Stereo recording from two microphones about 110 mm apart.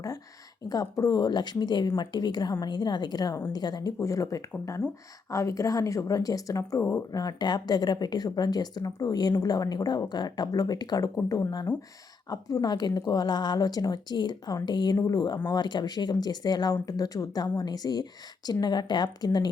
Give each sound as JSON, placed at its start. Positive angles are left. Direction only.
{"t": 0.7, "sound": "speech", "side_deg": 30}